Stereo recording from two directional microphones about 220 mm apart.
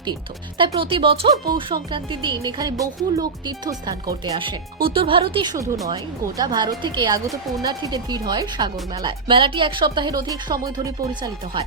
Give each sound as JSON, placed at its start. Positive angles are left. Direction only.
{"t": 0.6, "sound": "speech", "side_deg": -25}